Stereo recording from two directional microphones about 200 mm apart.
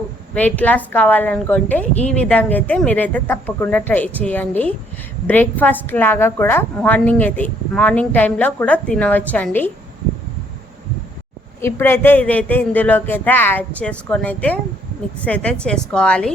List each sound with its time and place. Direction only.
0.3 s a woman's voice: 10° left (ahead or behind)
11.6 s a woman's voice: 10° left (ahead or behind)